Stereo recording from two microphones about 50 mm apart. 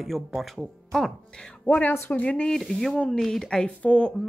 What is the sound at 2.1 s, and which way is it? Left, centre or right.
Speech, left.